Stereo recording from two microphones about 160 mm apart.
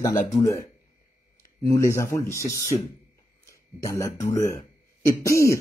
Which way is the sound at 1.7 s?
20° left (ahead or behind).